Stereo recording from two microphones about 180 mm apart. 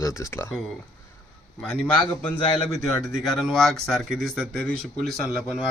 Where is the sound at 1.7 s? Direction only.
5° left (ahead or behind).